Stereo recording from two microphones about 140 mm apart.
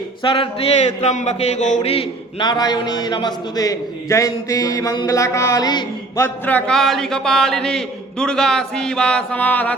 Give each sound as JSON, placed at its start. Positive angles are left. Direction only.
{"t": 0.2, "sound": "speech", "side_deg": 40}
{"t": 0.9, "sound": "a sound", "side_deg": 55}
{"t": 2.4, "sound": "a man's voice", "side_deg": 30}
{"t": 6.2, "sound": "a man's voice", "side_deg": 10}